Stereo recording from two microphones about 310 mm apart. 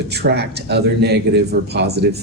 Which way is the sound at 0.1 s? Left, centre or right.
Right.